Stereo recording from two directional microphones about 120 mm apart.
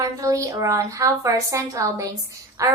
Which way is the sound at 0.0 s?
30° right (ahead or behind).